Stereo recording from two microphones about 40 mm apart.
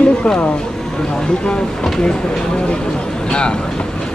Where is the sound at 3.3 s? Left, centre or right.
Left.